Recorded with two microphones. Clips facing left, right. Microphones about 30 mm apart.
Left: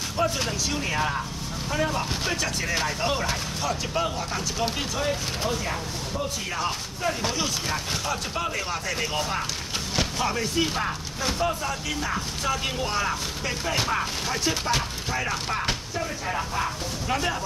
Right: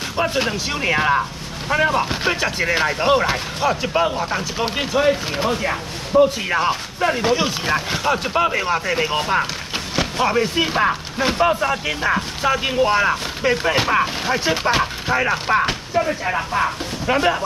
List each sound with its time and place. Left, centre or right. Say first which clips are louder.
0.2 s speech: right 5 dB; right
5.5 s speech: right 7 dB; right
12.6 s speech: right 10 dB; right